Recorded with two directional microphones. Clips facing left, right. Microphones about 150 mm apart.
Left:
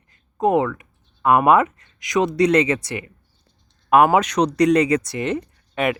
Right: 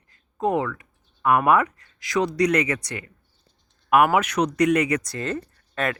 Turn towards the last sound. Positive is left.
turn(degrees=15)  # may be behind; listen again after turning